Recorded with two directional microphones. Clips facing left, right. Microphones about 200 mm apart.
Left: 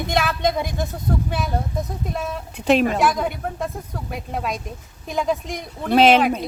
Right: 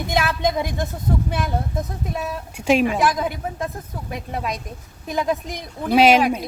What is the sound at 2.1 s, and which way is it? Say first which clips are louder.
Speech: even; 5° right (ahead or behind).